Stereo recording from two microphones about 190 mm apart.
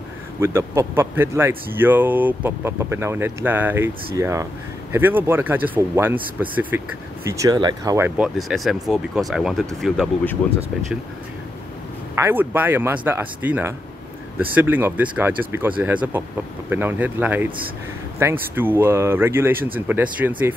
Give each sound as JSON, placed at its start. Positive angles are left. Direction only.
{"t": 0.4, "sound": "speech", "side_deg": -15}
{"t": 8.2, "sound": "speech", "side_deg": 0}
{"t": 12.2, "sound": "speech", "side_deg": -10}
{"t": 18.5, "sound": "speech", "side_deg": -10}